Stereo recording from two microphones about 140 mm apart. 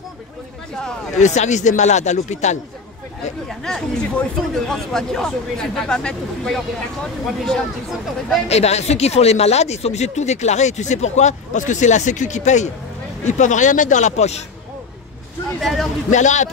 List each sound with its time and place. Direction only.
1.2 s speech: 55° left (ahead or behind)
3.4 s speech: 5° left (ahead or behind)
8.5 s speech: 50° left (ahead or behind)
15.6 s speech: centre (ahead or behind)
16.1 s speech: 60° left (ahead or behind)